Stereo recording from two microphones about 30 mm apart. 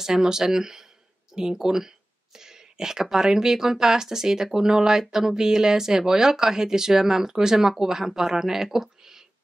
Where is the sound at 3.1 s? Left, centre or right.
Centre.